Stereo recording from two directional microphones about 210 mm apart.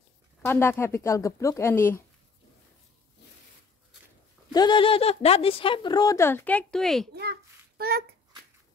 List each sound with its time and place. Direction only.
0.4 s speech: 10° left (ahead or behind)
4.5 s speech: 20° left (ahead or behind); by 7.1 s centre (ahead or behind)
7.2 s child singing: 50° right (ahead or behind)